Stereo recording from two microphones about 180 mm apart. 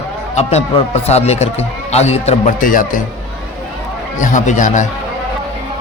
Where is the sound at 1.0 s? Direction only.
35° left (ahead or behind).